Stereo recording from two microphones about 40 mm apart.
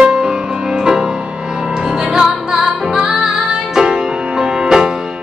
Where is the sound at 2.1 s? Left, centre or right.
Centre.